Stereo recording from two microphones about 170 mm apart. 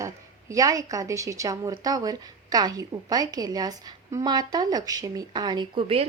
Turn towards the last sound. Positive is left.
turn(degrees=-30)  # may be behind; listen again after turning